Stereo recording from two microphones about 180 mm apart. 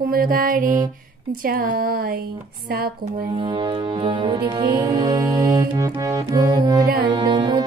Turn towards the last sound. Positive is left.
turn(degrees=-25)  # may be behind; listen again after turning